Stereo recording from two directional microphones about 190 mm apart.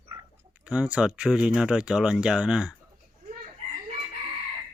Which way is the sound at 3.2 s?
45° right (ahead or behind).